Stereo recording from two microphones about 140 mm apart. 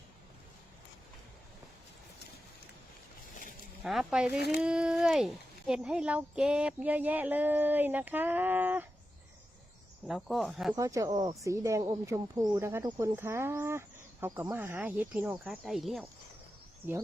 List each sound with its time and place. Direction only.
3.8 s speech: 5° right (ahead or behind)
10.1 s speech: centre (ahead or behind)
10.8 s speech: 25° right (ahead or behind); by 16.0 s centre (ahead or behind)